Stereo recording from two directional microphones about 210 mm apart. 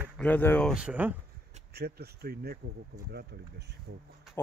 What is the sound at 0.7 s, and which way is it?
Speech, 5° right (ahead or behind).